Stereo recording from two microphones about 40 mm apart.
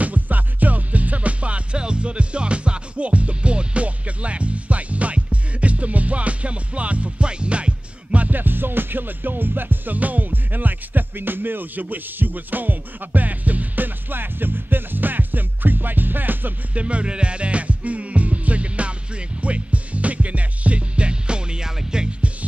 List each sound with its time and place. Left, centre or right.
0.0 s music: right
8.4 s music: right
9.9 s music: right
16.7 s music: right